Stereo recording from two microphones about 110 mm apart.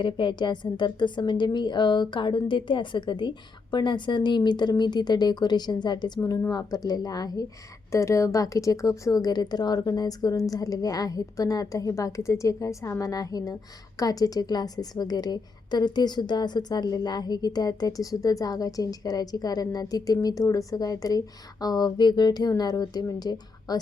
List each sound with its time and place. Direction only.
0.0 s a woman's voice: 45° left (ahead or behind)